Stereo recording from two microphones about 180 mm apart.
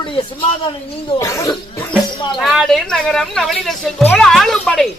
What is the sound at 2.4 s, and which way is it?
Speech, centre (ahead or behind).